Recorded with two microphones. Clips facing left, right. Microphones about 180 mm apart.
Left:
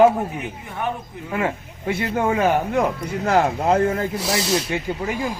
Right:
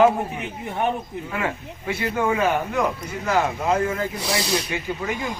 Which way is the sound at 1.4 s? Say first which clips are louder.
Left 5 dB; 50° left (ahead or behind).